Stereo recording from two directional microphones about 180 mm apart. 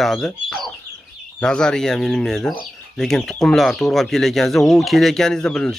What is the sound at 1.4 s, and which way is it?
Speech, 5° left (ahead or behind).